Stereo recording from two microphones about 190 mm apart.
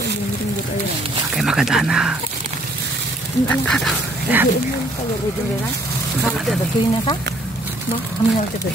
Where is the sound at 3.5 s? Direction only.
5° left (ahead or behind).